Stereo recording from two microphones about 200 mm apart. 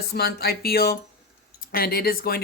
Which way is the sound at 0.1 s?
50° left (ahead or behind).